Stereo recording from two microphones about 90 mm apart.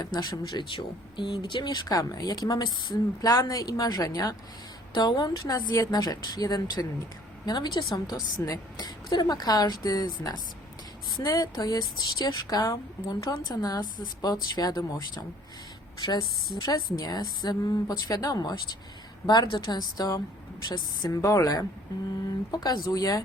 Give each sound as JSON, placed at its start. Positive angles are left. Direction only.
{"t": 0.0, "sound": "a woman's voice", "side_deg": 50}
{"t": 16.6, "sound": "a woman's voice", "side_deg": 45}
{"t": 19.6, "sound": "a woman's voice", "side_deg": 45}
{"t": 21.1, "sound": "a woman's voice", "side_deg": 35}